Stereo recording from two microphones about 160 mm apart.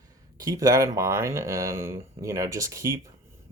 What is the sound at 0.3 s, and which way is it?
Speech, 20° right (ahead or behind).